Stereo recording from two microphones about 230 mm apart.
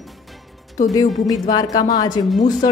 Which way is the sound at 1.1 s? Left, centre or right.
Centre.